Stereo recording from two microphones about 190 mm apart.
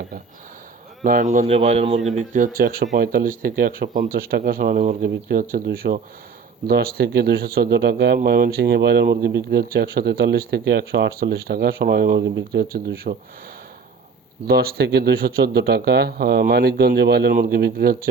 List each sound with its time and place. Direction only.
1.0 s a man's voice: 45° right (ahead or behind)
2.1 s speech: 45° right (ahead or behind)
14.4 s speech: 55° right (ahead or behind)